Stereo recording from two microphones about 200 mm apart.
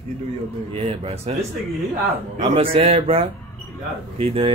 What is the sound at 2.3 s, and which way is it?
Speech, 30° right (ahead or behind).